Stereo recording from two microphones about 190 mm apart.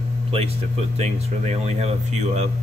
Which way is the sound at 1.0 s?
35° right (ahead or behind).